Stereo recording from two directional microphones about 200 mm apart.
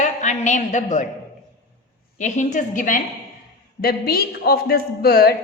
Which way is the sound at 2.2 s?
35° left (ahead or behind).